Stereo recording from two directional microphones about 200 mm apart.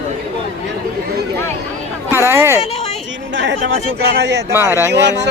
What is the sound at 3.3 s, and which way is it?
Speech, 65° right (ahead or behind).